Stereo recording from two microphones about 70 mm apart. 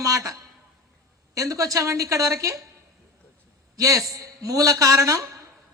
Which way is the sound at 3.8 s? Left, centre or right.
Right.